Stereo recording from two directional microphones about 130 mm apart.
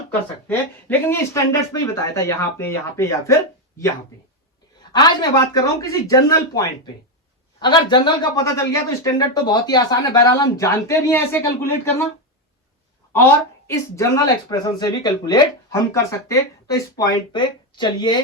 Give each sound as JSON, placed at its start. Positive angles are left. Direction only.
{"t": 0.4, "sound": "speech", "side_deg": 15}
{"t": 4.9, "sound": "a woman's voice", "side_deg": 35}
{"t": 9.2, "sound": "speech", "side_deg": 30}
{"t": 13.7, "sound": "a woman's voice", "side_deg": 20}
{"t": 15.9, "sound": "speech", "side_deg": 20}